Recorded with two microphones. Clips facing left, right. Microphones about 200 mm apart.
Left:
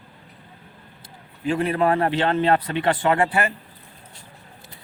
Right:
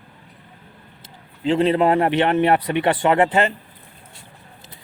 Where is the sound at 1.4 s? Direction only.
20° right (ahead or behind).